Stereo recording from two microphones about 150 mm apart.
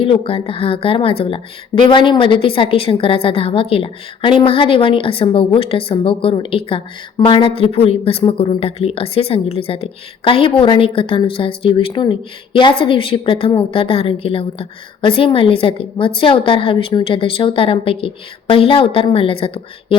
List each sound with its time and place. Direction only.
0.0 s a woman's voice: 35° left (ahead or behind)